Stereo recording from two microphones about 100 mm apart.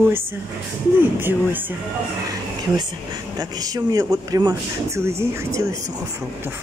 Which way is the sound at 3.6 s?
40° right (ahead or behind).